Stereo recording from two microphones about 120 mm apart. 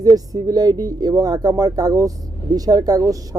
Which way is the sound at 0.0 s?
30° right (ahead or behind).